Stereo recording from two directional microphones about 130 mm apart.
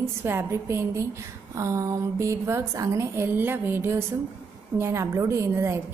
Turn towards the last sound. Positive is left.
turn(degrees=-20)  # may be behind; listen again after turning